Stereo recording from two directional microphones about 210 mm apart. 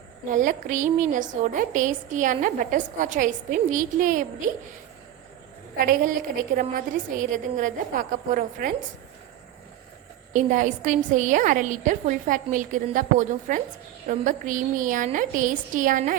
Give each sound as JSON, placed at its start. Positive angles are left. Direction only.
{"t": 0.3, "sound": "a woman's voice", "side_deg": -40}
{"t": 5.8, "sound": "a woman's voice", "side_deg": -40}
{"t": 10.3, "sound": "a woman's voice", "side_deg": -35}